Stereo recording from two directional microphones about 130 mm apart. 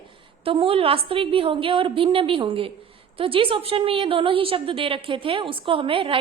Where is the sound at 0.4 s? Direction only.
45° right (ahead or behind).